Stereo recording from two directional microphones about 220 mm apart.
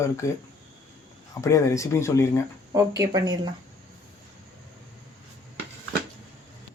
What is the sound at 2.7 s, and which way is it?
Speech, 15° right (ahead or behind).